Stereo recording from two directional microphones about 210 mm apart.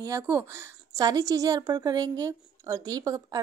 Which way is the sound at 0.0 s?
15° right (ahead or behind).